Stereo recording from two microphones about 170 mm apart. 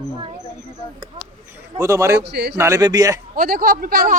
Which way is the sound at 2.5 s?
20° right (ahead or behind).